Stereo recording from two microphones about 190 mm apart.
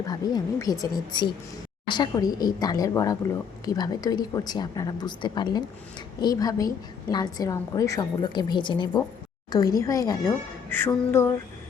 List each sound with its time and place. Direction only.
0.1 s a woman's voice: 20° left (ahead or behind)